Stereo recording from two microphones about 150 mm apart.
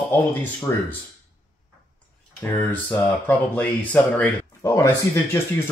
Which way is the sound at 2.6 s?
10° left (ahead or behind).